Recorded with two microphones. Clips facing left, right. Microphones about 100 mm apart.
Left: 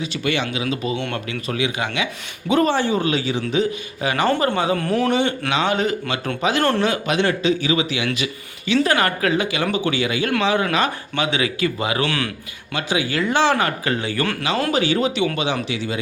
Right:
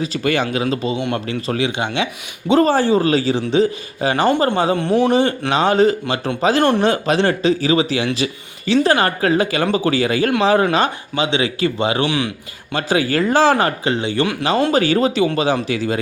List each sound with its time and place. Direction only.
0.0 s a man's voice: 40° right (ahead or behind)
0.9 s a man's voice: 15° right (ahead or behind)
1.3 s a man's voice: 35° right (ahead or behind)
5.5 s a man's voice: 35° right (ahead or behind)
6.6 s a man's voice: 20° right (ahead or behind)
6.8 s a man's voice: 35° right (ahead or behind)
12.0 s a man's voice: 20° right (ahead or behind)
12.7 s a man's voice: 40° right (ahead or behind); by 14.3 s 20° right (ahead or behind)
14.7 s a man's voice: 40° right (ahead or behind)